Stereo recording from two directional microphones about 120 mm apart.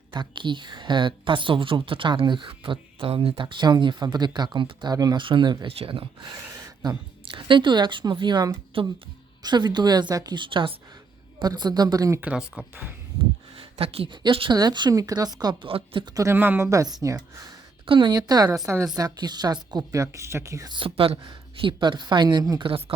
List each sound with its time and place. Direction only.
0.1 s a woman's voice: 40° right (ahead or behind)
5.6 s a woman's voice: 50° right (ahead or behind)
8.7 s speech: 50° right (ahead or behind)
9.4 s a woman's voice: 35° right (ahead or behind)
12.2 s speech: 10° right (ahead or behind)
13.6 s a woman's voice: 55° right (ahead or behind); by 15.5 s 35° right (ahead or behind)
15.6 s speech: 50° right (ahead or behind)
16.1 s speech: 20° right (ahead or behind)
17.8 s a woman's voice: 45° right (ahead or behind); by 20.7 s 25° right (ahead or behind)
20.7 s a woman's voice: 50° right (ahead or behind)